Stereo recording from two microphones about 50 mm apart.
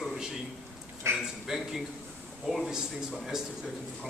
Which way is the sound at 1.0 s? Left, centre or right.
Right.